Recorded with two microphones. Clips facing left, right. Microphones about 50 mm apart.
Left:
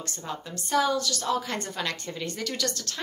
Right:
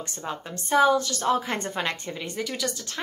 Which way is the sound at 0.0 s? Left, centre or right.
Right.